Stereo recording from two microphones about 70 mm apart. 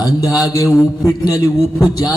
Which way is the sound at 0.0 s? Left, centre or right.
Left.